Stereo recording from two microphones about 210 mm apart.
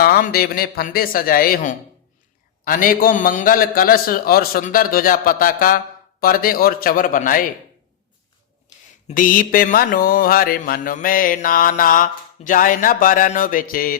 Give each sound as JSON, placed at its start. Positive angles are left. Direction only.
{"t": 0.0, "sound": "a man's voice", "side_deg": 45}
{"t": 9.0, "sound": "mantra", "side_deg": 40}